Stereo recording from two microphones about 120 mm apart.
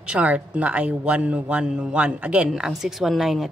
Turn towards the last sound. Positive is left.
turn(degrees=0)  # may be behind; listen again after turning